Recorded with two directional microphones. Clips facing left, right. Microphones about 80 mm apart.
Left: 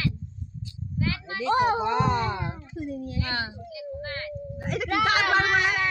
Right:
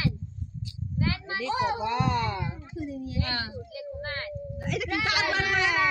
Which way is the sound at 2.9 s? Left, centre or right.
Left.